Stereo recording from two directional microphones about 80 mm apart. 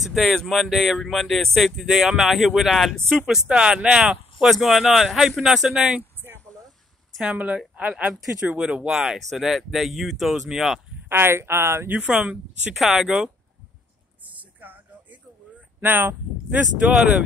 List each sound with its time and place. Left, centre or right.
0.0 s speech: centre
7.3 s speech: centre
11.1 s speech: right
11.9 s speech: centre
12.7 s speech: centre
14.6 s music: right
15.8 s speech: right